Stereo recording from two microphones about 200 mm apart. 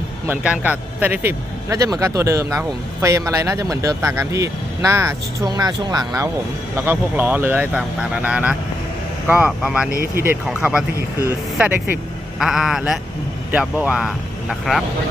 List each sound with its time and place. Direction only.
0.3 s a man's voice: 10° right (ahead or behind)
9.9 s speech: 45° right (ahead or behind)
10.6 s speech: 5° right (ahead or behind)
11.2 s a man's voice: 15° right (ahead or behind)
12.4 s speech: centre (ahead or behind)